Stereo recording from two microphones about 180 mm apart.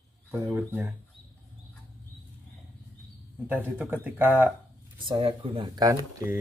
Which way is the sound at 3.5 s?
10° right (ahead or behind).